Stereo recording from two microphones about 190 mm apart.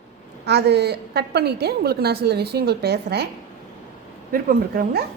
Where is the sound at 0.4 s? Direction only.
60° right (ahead or behind).